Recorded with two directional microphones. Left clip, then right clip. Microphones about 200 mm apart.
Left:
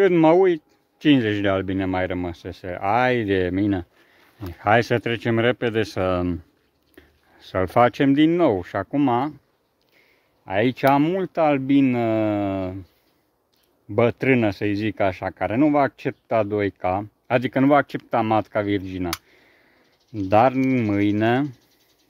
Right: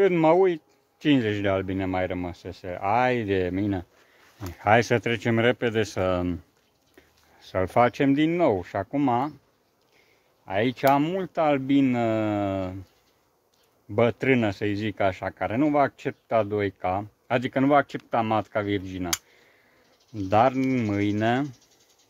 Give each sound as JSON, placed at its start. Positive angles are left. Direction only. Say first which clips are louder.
{"t": 0.0, "sound": "speech", "louder": "left 4 dB", "side_deg": 45}
{"t": 4.6, "sound": "speech", "louder": "left 2 dB", "side_deg": 20}
{"t": 9.9, "sound": "speech", "louder": "left 3 dB", "side_deg": 55}
{"t": 13.9, "sound": "speech", "louder": "left 3 dB", "side_deg": 50}
{"t": 20.2, "sound": "speech", "louder": "left 4 dB", "side_deg": 55}